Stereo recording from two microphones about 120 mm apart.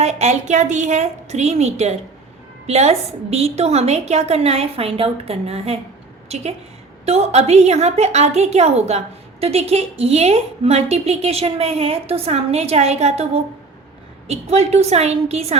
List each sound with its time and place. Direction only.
0.0 s a woman's voice: 70° right (ahead or behind)